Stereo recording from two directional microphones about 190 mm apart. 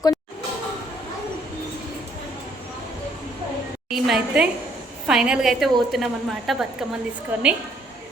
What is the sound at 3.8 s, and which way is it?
A woman's voice, centre (ahead or behind).